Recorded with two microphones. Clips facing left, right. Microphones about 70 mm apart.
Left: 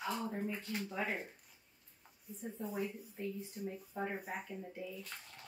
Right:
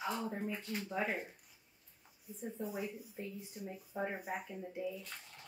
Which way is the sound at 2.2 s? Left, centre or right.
Centre.